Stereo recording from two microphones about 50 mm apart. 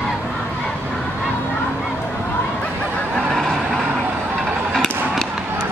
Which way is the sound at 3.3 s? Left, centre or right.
Centre.